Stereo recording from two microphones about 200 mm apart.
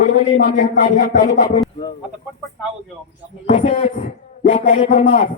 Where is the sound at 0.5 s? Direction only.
40° left (ahead or behind).